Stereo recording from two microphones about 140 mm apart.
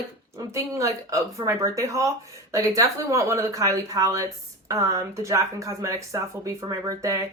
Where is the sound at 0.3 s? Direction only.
20° right (ahead or behind).